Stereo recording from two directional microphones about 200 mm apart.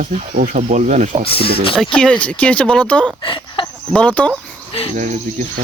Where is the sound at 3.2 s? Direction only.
25° left (ahead or behind).